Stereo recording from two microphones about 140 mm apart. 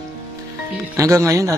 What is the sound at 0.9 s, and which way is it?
Speech, 20° right (ahead or behind).